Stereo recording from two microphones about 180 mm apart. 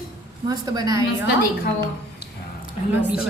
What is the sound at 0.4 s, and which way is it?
Speech, 20° right (ahead or behind).